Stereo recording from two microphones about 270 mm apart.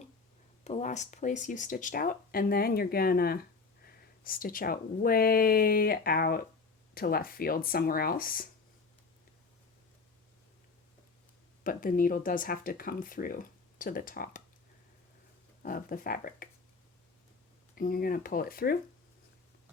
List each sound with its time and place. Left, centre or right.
0.6 s speech: left
11.6 s speech: left
15.6 s speech: left
17.7 s speech: left